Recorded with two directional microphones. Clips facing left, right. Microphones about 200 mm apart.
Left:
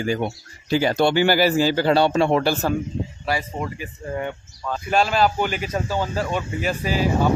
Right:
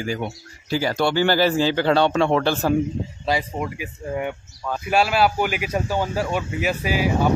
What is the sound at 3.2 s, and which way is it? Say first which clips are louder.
Speech: right 3 dB; 10° right (ahead or behind).